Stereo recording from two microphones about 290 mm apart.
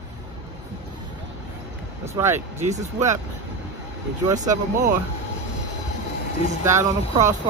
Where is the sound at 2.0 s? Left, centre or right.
Centre.